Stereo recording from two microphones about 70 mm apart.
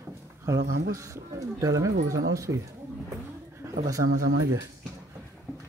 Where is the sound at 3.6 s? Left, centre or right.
Right.